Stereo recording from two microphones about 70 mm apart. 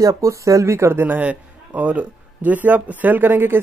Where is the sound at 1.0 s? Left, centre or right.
Right.